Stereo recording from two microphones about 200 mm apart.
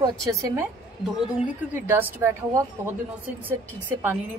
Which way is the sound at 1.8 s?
10° right (ahead or behind).